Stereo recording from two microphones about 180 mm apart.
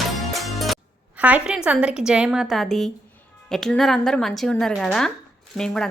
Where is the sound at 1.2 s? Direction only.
5° right (ahead or behind).